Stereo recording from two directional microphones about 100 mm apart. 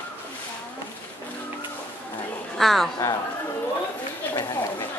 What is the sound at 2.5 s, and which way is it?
Speech, centre (ahead or behind).